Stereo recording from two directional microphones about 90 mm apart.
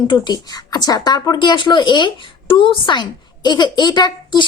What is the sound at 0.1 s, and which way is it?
Speech, 50° left (ahead or behind).